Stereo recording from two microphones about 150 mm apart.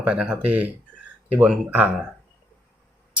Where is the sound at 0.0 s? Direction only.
10° right (ahead or behind).